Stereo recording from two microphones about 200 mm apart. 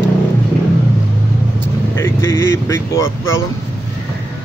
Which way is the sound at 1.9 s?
15° left (ahead or behind).